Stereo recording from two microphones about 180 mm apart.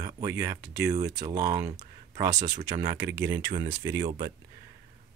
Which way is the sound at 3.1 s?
20° right (ahead or behind).